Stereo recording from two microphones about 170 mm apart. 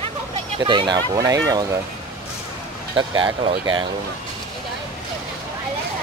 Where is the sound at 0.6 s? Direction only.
25° right (ahead or behind).